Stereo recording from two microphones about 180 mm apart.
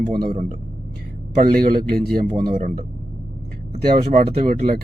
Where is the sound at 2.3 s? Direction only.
35° right (ahead or behind).